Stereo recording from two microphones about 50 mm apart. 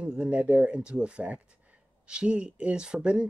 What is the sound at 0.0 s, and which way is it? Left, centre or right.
Speech, right.